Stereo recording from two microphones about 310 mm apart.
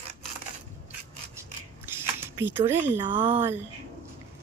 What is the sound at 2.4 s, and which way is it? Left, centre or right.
Speech, centre.